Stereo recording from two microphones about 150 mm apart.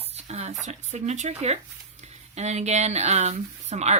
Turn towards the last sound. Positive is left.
turn(degrees=-45)  # may be behind; listen again after turning